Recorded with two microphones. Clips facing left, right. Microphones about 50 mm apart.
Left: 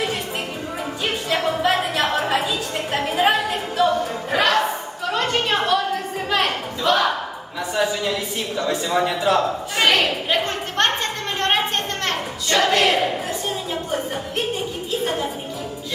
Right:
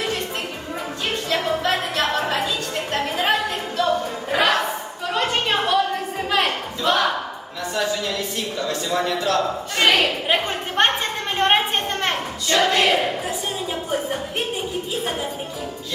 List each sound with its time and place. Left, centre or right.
1.3 s a sound: centre
7.7 s speech: centre
9.7 s speech: centre
10.2 s a woman's voice: centre
11.3 s a sound: centre
12.5 s speech: centre
13.7 s music: centre